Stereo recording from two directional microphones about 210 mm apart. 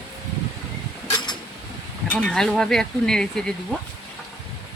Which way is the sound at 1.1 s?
20° left (ahead or behind).